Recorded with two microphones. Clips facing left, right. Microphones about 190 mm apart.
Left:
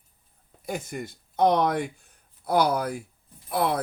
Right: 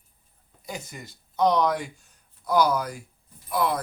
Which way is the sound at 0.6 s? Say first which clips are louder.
Left 6 dB; 55° left (ahead or behind).